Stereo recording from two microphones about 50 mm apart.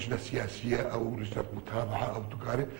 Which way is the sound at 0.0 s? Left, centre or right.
Centre.